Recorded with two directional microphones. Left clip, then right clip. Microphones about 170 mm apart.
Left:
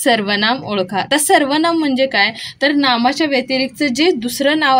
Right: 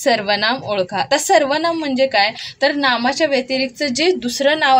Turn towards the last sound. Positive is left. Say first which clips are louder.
# even
turn(degrees=-5)  # may be behind; listen again after turning